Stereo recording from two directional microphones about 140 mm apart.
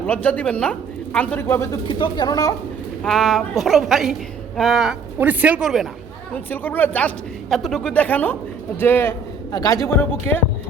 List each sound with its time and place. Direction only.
0.0 s speech: 10° left (ahead or behind)
1.9 s speech: 35° left (ahead or behind)
3.0 s a woman's voice: centre (ahead or behind)
6.3 s speech: 15° left (ahead or behind)
7.5 s a man's voice: centre (ahead or behind); by 9.8 s 25° left (ahead or behind)
10.0 s speech: 15° left (ahead or behind)